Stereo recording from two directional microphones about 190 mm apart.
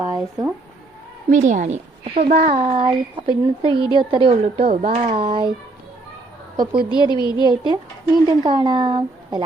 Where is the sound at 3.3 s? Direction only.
25° right (ahead or behind).